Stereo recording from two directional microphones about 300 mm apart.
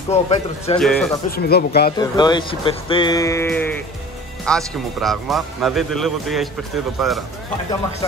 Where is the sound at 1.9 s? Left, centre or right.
Centre.